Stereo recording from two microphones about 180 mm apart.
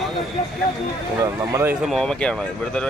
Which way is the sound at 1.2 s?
15° right (ahead or behind).